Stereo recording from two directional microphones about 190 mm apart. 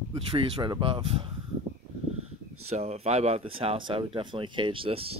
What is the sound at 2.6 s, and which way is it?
Speech, 35° right (ahead or behind).